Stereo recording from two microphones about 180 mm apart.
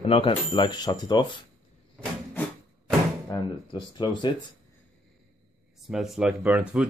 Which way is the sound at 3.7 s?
25° left (ahead or behind).